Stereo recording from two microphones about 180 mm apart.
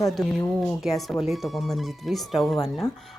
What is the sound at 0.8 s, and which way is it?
Speech, centre (ahead or behind).